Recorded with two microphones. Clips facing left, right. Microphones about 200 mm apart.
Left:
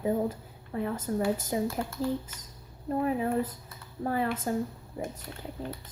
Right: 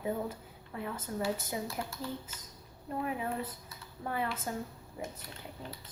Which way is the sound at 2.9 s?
40° left (ahead or behind).